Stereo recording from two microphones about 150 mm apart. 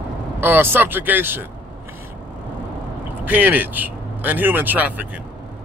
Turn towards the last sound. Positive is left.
turn(degrees=-10)  # may be behind; listen again after turning